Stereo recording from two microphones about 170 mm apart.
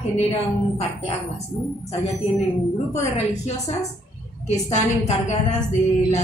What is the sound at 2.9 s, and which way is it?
A woman's voice, 40° left (ahead or behind).